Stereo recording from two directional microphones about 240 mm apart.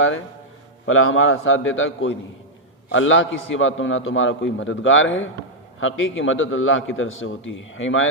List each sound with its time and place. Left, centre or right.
0.9 s a man's voice: left